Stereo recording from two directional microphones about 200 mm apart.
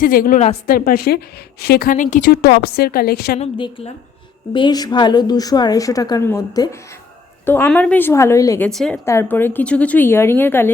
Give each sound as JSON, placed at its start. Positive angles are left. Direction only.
{"t": 0.0, "sound": "a woman's voice", "side_deg": 45}
{"t": 2.3, "sound": "a woman's voice", "side_deg": 50}
{"t": 3.3, "sound": "a woman's voice", "side_deg": 30}